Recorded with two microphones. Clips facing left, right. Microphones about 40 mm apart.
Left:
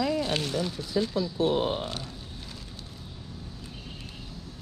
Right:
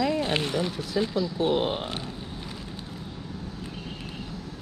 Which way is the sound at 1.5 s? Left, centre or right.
Right.